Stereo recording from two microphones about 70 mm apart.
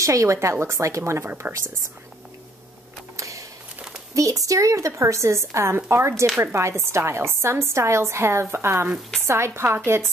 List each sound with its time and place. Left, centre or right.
0.0 s a woman's voice: right
3.2 s a sound: right
4.1 s a woman's voice: right